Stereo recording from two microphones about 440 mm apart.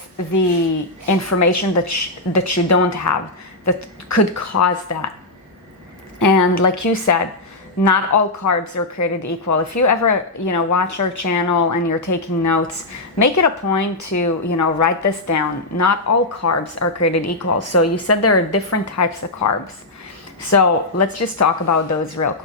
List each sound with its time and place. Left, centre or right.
1.0 s a woman's voice: left
6.1 s a woman's voice: left